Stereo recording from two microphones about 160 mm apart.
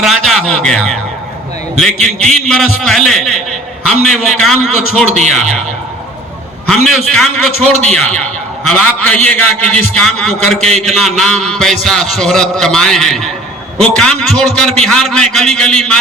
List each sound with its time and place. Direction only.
0.0 s a man's voice: centre (ahead or behind)
5.0 s speech: 45° right (ahead or behind)
6.7 s a man's voice: 5° left (ahead or behind)